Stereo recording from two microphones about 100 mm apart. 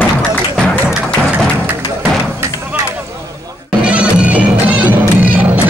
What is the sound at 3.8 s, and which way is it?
Music, 10° right (ahead or behind).